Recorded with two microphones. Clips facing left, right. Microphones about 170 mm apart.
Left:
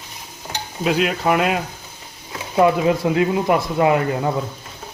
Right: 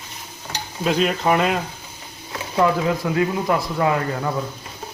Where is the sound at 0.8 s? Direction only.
5° left (ahead or behind).